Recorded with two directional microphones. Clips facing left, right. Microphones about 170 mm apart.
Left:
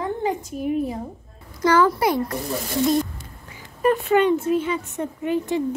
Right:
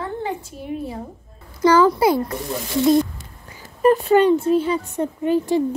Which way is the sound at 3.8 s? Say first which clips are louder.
Right 4 dB; 35° right (ahead or behind).